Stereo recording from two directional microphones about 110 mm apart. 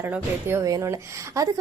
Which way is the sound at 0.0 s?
20° right (ahead or behind).